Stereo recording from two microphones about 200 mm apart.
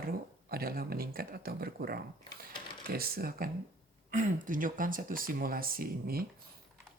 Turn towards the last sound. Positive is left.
turn(degrees=-50)  # may be behind; listen again after turning